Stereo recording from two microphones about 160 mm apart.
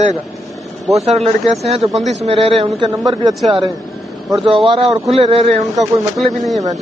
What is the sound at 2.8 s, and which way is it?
Speech, 25° right (ahead or behind).